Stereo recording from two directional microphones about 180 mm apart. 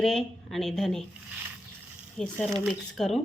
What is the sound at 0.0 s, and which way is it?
Speech, 5° left (ahead or behind).